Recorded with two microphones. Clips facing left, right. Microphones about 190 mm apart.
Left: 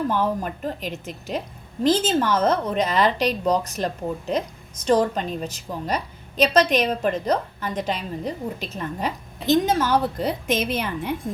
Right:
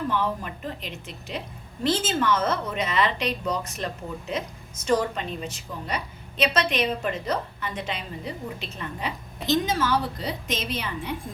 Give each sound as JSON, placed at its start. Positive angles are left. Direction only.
{"t": 0.1, "sound": "a woman's voice", "side_deg": 45}
{"t": 4.9, "sound": "a woman's voice", "side_deg": 35}